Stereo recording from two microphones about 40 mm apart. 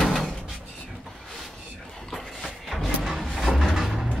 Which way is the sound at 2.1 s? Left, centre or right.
Centre.